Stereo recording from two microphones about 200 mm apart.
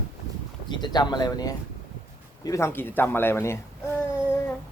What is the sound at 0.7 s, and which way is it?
A man's voice, 20° left (ahead or behind).